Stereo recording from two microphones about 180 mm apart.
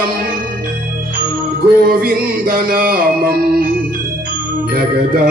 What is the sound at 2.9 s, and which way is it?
Music, 55° right (ahead or behind).